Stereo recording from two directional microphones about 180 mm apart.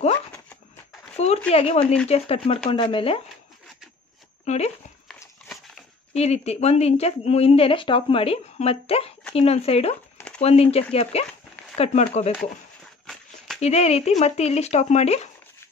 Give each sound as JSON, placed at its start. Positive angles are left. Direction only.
{"t": 1.1, "sound": "a sound", "side_deg": 35}
{"t": 1.5, "sound": "speech", "side_deg": 35}
{"t": 4.5, "sound": "speech", "side_deg": 40}
{"t": 6.1, "sound": "speech", "side_deg": 35}
{"t": 10.1, "sound": "a sound", "side_deg": 5}
{"t": 10.4, "sound": "speech", "side_deg": 35}
{"t": 13.6, "sound": "speech", "side_deg": 35}